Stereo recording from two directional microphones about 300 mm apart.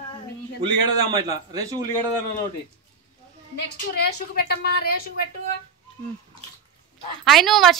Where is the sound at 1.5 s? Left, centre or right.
Centre.